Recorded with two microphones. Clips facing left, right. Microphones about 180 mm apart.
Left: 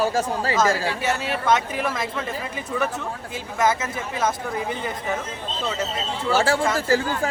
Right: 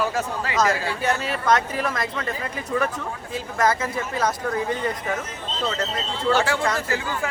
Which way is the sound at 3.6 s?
5° left (ahead or behind).